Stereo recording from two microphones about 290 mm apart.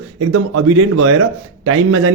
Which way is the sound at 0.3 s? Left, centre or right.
Right.